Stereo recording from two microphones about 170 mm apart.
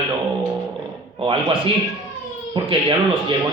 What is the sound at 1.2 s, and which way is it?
Speech, 30° right (ahead or behind).